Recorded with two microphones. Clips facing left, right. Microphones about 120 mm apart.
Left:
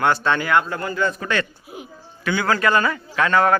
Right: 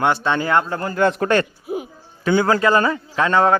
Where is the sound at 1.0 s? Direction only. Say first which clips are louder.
Right 7 dB; 65° right (ahead or behind).